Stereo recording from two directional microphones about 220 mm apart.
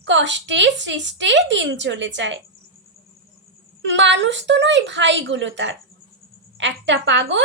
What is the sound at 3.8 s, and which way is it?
A woman's voice, 55° right (ahead or behind).